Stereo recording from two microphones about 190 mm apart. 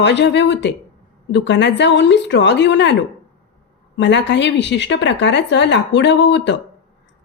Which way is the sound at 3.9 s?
70° left (ahead or behind).